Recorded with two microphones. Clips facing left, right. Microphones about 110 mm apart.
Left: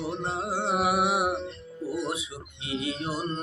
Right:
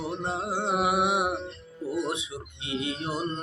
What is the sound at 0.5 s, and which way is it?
Music, 20° right (ahead or behind).